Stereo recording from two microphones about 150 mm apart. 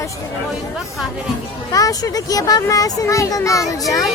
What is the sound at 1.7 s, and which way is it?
A child's voice, 25° left (ahead or behind).